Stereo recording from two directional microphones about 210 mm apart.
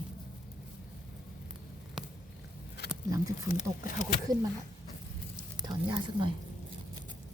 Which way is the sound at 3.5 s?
35° left (ahead or behind).